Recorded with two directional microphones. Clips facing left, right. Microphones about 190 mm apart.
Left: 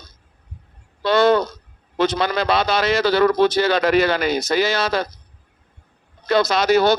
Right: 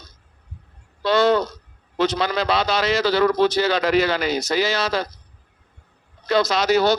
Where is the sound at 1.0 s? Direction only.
55° left (ahead or behind).